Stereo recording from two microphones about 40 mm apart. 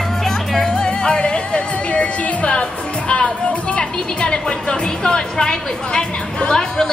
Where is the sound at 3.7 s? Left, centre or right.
Left.